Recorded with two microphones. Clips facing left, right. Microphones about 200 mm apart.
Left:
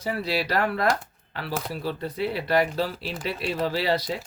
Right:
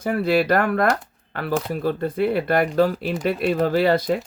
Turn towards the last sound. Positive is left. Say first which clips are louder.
# right 7 dB
turn(degrees=-50)  # may be behind; listen again after turning